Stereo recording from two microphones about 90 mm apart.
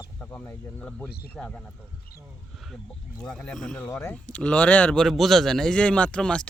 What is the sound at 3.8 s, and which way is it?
Speech, 25° left (ahead or behind).